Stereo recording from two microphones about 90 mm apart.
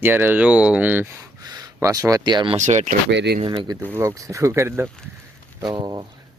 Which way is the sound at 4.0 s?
35° right (ahead or behind).